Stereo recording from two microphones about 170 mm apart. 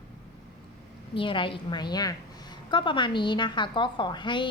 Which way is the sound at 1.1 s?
30° left (ahead or behind).